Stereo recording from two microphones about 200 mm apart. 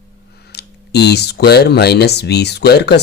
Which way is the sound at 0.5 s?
55° left (ahead or behind).